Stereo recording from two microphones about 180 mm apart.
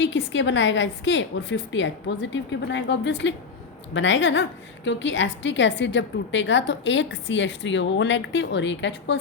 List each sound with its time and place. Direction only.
0.0 s a woman's voice: 85° left